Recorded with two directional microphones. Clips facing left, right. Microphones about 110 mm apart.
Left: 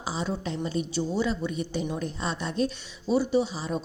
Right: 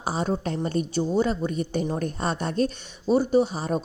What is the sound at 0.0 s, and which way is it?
A woman's voice, 50° right (ahead or behind).